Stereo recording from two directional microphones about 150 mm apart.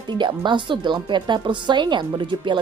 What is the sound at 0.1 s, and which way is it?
Speech, 30° right (ahead or behind).